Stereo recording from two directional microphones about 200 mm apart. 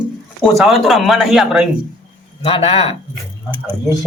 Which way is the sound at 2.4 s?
30° left (ahead or behind).